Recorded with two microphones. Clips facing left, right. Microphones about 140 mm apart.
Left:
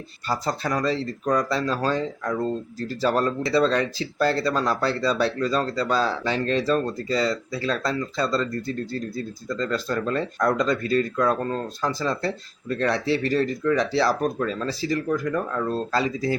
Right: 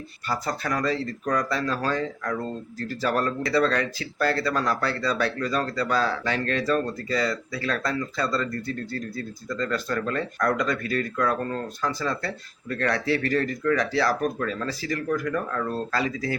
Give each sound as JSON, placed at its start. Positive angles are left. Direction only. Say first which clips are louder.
{"t": 0.3, "sound": "speech", "louder": "left 2 dB", "side_deg": 25}